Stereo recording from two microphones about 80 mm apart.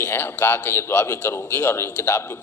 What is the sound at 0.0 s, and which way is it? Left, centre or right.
A man's voice, left.